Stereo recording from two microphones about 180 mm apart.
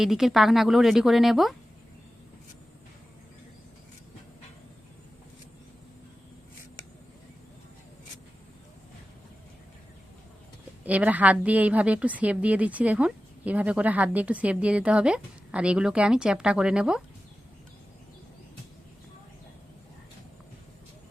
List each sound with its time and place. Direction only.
0.0 s speech: centre (ahead or behind)
10.8 s a woman's voice: 10° right (ahead or behind)